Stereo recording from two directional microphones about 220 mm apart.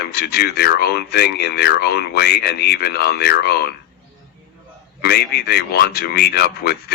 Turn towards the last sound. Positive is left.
turn(degrees=45)  # may be behind; listen again after turning